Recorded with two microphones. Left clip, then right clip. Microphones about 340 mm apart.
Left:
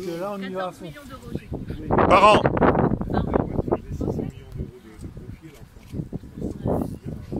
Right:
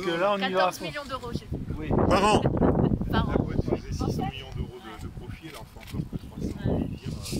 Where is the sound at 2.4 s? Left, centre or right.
Left.